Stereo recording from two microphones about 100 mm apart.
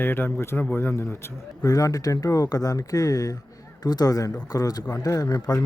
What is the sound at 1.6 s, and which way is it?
Speech, 35° left (ahead or behind).